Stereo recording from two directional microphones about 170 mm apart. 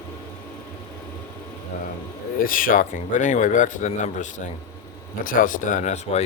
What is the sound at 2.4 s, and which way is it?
Speech, 55° left (ahead or behind).